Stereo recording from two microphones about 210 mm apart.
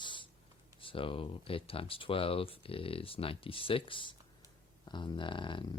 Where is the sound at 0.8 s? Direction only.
25° left (ahead or behind).